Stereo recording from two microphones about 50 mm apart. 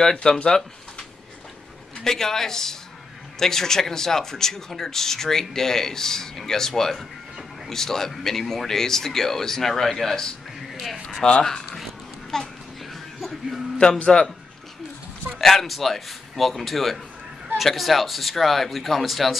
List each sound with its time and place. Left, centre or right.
0.0 s speech: centre
2.0 s speech: centre
11.4 s a sound: centre
12.3 s speech: centre
12.9 s a sound: centre
13.7 s a man's voice: centre
15.3 s speech: centre